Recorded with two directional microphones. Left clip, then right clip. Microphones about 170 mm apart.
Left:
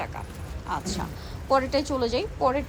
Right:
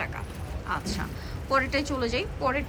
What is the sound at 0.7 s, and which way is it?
A woman's voice, 20° left (ahead or behind).